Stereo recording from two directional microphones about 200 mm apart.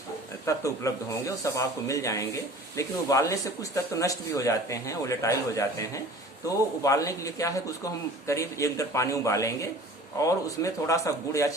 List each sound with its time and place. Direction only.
0.4 s speech: 15° left (ahead or behind)